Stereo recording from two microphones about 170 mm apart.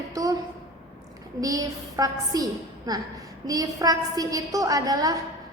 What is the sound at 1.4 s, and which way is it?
A woman's voice, 20° right (ahead or behind).